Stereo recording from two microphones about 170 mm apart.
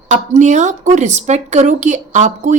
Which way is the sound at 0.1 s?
45° right (ahead or behind).